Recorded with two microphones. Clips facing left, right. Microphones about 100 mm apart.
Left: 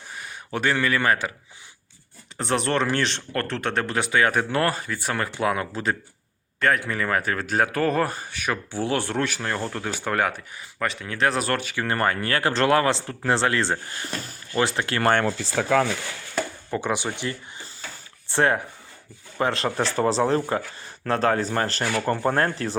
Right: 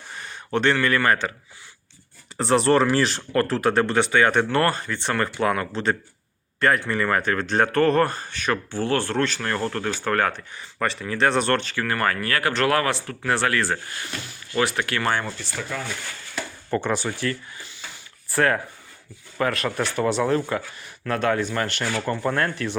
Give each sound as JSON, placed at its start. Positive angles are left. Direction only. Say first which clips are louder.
{"t": 0.1, "sound": "speech", "louder": "right 5 dB", "side_deg": 5}
{"t": 2.4, "sound": "speech", "louder": "right 5 dB", "side_deg": 0}
{"t": 11.9, "sound": "speech", "louder": "left 1 dB", "side_deg": 25}
{"t": 15.7, "sound": "speech", "louder": "left 13 dB", "side_deg": 90}
{"t": 16.7, "sound": "speech", "louder": "right 2 dB", "side_deg": 15}